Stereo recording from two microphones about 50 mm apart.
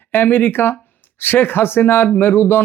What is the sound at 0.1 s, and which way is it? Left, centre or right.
Speech, left.